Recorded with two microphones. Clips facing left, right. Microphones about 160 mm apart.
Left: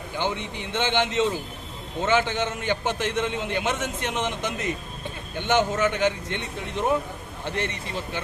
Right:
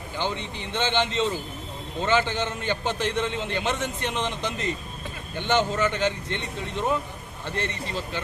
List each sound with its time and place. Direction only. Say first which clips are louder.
0.2 s a man's voice: left 1 dB; 15° left (ahead or behind)